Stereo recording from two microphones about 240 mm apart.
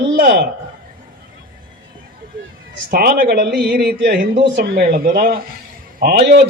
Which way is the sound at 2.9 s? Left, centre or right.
Right.